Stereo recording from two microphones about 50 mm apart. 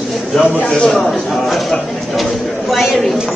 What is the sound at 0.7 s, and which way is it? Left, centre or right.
Speech, centre.